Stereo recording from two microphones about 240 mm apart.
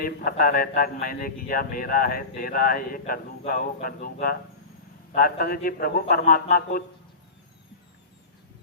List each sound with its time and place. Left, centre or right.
0.0 s a man's voice: left